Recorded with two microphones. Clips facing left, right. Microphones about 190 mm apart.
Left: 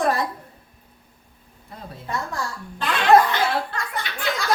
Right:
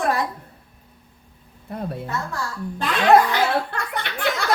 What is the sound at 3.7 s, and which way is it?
Speech, 60° right (ahead or behind).